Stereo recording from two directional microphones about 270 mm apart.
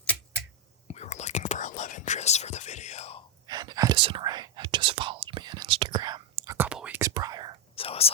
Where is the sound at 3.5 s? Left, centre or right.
Centre.